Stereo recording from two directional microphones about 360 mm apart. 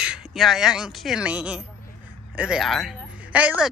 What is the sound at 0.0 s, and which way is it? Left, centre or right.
Speech, centre.